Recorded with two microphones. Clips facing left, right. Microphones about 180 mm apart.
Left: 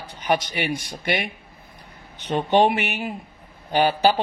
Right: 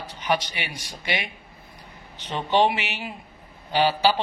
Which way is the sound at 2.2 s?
50° left (ahead or behind).